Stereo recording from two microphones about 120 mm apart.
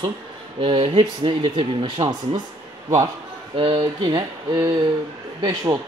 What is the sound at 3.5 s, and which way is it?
Speech, 50° right (ahead or behind).